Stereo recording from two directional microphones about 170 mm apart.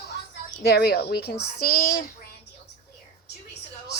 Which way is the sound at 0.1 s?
75° left (ahead or behind).